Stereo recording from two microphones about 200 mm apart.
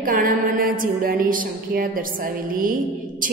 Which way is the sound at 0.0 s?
45° right (ahead or behind).